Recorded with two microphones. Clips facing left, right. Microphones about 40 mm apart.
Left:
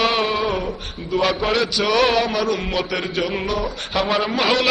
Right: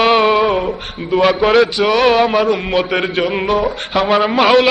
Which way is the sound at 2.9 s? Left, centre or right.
Right.